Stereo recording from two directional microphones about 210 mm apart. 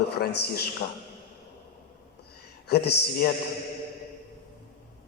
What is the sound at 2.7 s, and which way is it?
Speech, 50° left (ahead or behind).